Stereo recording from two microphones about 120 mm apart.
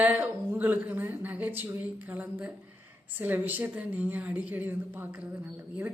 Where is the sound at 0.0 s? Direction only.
15° right (ahead or behind).